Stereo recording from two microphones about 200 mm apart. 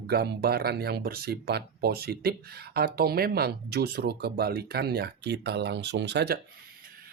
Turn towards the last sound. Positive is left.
turn(degrees=-55)  # may be behind; listen again after turning